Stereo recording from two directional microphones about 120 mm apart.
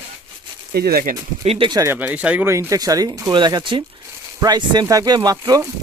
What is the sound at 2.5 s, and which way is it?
Speech, 25° right (ahead or behind).